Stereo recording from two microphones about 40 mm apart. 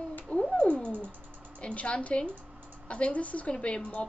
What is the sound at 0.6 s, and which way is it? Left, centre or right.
Cat, left.